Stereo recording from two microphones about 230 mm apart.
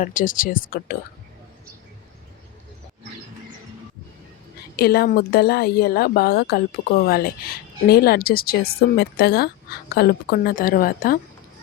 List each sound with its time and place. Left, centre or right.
0.0 s speech: left
4.8 s a woman's voice: left